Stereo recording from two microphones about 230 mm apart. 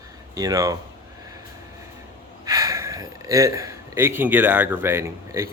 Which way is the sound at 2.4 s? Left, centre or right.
Centre.